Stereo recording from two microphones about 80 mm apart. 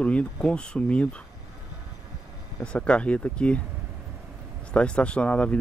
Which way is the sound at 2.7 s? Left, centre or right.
Centre.